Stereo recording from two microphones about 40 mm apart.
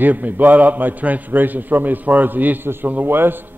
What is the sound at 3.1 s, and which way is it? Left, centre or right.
Speech, right.